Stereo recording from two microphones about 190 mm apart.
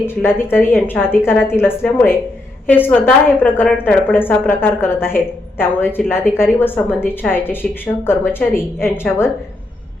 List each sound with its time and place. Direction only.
0.1 s a woman's voice: 10° left (ahead or behind)